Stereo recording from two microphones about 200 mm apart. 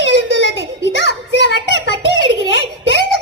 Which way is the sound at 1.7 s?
65° left (ahead or behind).